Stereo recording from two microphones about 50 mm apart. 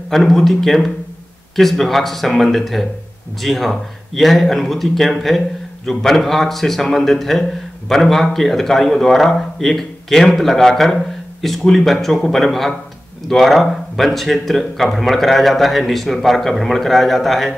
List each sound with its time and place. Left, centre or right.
0.1 s speech: centre